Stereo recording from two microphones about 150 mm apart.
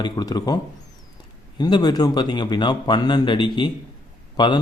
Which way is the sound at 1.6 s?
30° left (ahead or behind).